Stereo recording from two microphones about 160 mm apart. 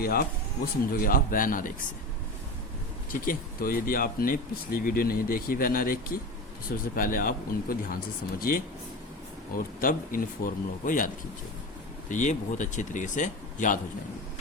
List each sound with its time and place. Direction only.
0.0 s speech: 70° left (ahead or behind)
3.1 s speech: 60° left (ahead or behind)
9.8 s speech: 60° left (ahead or behind)